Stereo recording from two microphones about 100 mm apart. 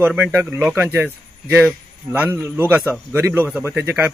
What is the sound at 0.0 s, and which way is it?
Speech, 20° right (ahead or behind).